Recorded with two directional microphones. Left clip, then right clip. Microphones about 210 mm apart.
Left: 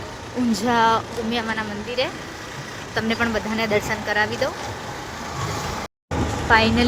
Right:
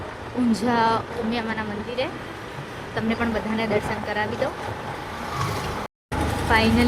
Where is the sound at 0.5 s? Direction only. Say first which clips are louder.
Left 3 dB; 5° left (ahead or behind).